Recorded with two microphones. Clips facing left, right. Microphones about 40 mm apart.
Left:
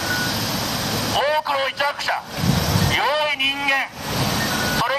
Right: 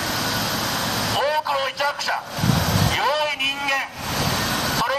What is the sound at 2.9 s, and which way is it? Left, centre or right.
Vehicle, centre.